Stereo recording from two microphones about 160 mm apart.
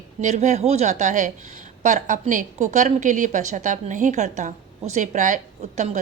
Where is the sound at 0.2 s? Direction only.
45° right (ahead or behind).